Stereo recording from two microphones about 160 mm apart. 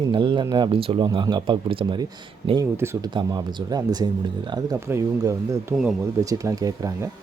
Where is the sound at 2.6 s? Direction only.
15° right (ahead or behind).